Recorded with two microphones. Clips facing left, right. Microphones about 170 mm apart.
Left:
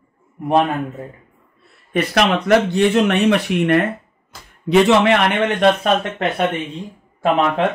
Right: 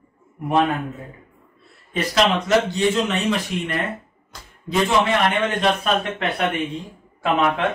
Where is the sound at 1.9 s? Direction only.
60° left (ahead or behind).